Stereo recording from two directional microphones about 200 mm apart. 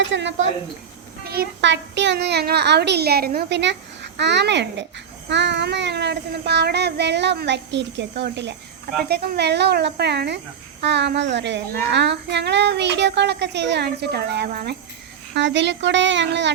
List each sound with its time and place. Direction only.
0.0 s a woman's voice: 65° right (ahead or behind)
1.2 s speech: 50° right (ahead or behind)
15.4 s speech: 60° right (ahead or behind)